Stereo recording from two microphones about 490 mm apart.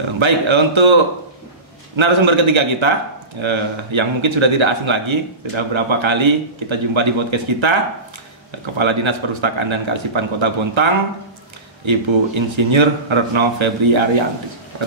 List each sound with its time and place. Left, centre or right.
0.2 s speech: right
2.0 s speech: right
8.7 s speech: right